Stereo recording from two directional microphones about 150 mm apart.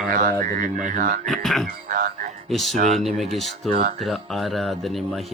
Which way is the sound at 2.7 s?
55° right (ahead or behind).